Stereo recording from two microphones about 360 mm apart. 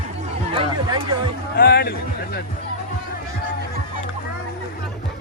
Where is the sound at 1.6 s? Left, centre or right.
Left.